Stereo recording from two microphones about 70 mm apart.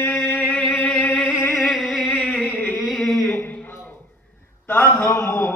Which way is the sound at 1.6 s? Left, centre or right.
Centre.